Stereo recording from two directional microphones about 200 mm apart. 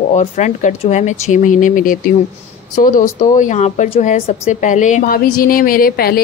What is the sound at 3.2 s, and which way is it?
Speech, 40° left (ahead or behind).